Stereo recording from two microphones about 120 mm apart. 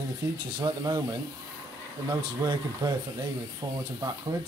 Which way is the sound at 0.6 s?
35° right (ahead or behind).